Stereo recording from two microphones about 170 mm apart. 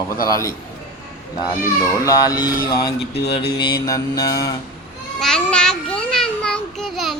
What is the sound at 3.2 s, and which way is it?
Mantra, 75° left (ahead or behind).